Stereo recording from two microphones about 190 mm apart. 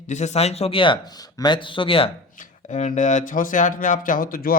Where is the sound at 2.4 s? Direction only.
40° left (ahead or behind).